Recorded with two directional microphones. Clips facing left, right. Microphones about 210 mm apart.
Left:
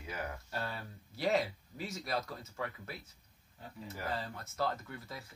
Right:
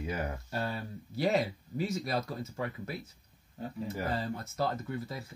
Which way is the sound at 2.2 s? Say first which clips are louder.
Right 5 dB; 25° right (ahead or behind).